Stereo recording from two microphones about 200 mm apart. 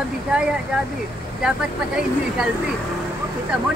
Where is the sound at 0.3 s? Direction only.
5° right (ahead or behind).